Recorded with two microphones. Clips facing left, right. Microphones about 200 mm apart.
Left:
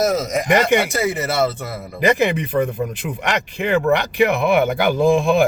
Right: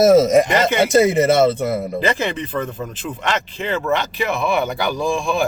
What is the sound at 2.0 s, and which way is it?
Speech, 15° left (ahead or behind).